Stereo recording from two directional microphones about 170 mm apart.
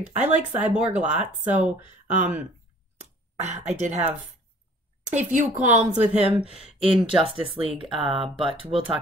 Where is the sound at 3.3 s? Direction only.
40° right (ahead or behind).